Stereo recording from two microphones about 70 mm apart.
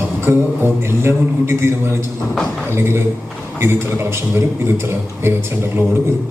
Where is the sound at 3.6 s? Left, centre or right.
Right.